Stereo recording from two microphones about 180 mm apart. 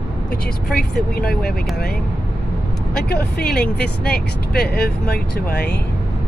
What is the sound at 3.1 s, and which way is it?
Speech, 60° left (ahead or behind).